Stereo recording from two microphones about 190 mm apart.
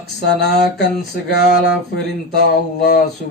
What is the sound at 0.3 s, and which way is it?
Speech, 60° left (ahead or behind).